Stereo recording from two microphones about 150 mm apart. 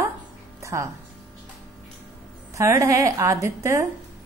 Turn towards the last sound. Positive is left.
turn(degrees=-20)  # may be behind; listen again after turning